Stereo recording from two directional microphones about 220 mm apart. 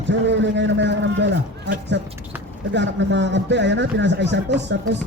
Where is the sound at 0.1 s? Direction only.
55° right (ahead or behind).